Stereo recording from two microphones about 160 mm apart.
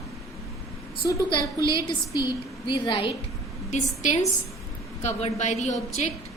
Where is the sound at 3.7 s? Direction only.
50° left (ahead or behind).